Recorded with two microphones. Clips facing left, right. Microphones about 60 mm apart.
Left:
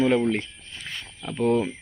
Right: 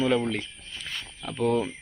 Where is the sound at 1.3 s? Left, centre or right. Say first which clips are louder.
Left 3 dB; left.